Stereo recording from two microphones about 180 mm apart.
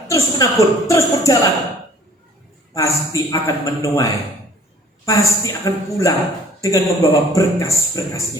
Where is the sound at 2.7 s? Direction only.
15° left (ahead or behind).